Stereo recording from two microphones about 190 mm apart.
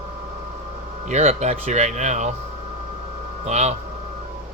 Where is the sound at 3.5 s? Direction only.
35° right (ahead or behind).